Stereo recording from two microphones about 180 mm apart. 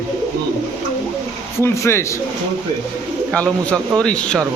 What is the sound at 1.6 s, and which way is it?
Speech, 15° left (ahead or behind).